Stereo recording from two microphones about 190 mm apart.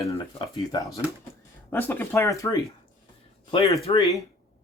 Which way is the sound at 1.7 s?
10° left (ahead or behind).